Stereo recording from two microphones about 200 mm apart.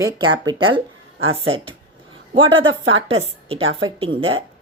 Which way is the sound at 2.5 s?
75° right (ahead or behind).